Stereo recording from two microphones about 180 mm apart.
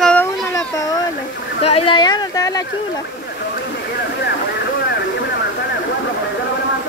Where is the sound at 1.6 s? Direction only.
35° left (ahead or behind).